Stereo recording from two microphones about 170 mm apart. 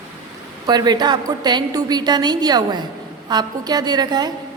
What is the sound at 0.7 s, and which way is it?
A woman's voice, 25° right (ahead or behind).